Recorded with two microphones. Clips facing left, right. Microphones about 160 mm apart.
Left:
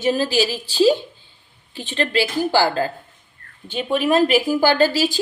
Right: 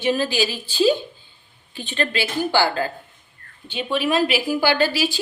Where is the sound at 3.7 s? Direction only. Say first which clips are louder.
Left 3 dB; 45° left (ahead or behind).